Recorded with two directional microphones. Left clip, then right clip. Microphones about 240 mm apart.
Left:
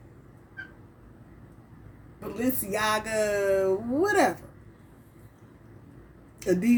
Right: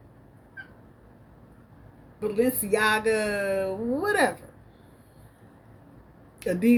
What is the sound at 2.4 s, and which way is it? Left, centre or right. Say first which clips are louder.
Speech: right 5 dB; right.